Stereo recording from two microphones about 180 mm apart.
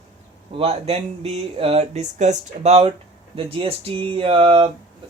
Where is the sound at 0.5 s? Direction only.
35° right (ahead or behind).